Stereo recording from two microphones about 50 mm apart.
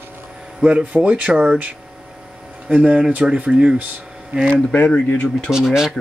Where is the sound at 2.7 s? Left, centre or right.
Right.